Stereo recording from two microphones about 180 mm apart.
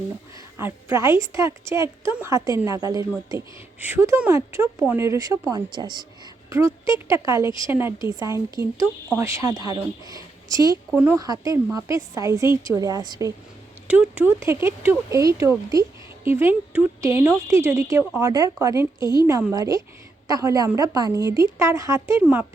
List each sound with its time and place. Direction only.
0.3 s speech: 15° right (ahead or behind)
10.9 s speech: 10° right (ahead or behind)
13.8 s speech: 10° right (ahead or behind)